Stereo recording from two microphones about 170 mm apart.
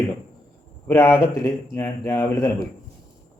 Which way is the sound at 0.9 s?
15° left (ahead or behind).